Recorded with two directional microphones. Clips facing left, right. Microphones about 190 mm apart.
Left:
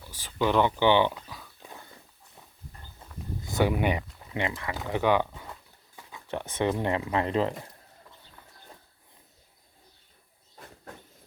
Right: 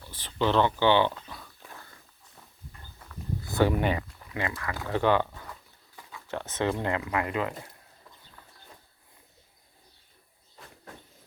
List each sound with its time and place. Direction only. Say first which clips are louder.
0.0 s a sound: even; 10° left (ahead or behind)
1.6 s dog: left 2 dB; 20° left (ahead or behind)
3.0 s walk: right 2 dB; 15° left (ahead or behind)
4.3 s speech: left 2 dB; 20° left (ahead or behind)